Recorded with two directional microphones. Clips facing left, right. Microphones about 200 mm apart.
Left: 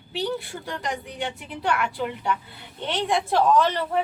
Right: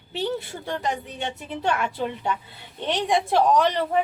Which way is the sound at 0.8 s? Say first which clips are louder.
Left 1 dB; 25° right (ahead or behind).